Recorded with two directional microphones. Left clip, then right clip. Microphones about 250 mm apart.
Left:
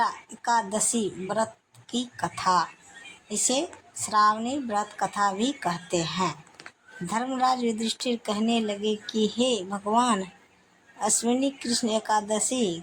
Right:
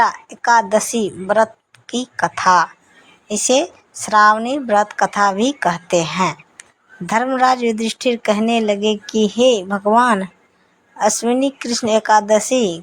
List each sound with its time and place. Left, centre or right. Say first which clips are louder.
0.0 s speech: right 11 dB; right